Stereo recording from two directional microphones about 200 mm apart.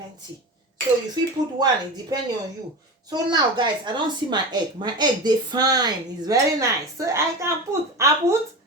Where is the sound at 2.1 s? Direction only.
20° right (ahead or behind).